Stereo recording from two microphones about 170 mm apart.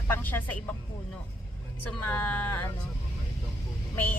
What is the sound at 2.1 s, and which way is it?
Speech, 10° left (ahead or behind).